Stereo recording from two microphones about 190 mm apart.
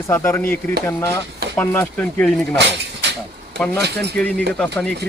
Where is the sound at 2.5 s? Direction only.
65° right (ahead or behind).